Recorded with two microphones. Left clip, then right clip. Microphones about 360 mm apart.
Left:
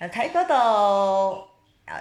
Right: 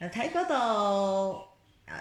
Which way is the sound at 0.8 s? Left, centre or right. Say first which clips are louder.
Left 8 dB; left.